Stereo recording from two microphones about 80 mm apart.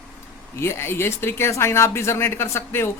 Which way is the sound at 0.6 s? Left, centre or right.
Left.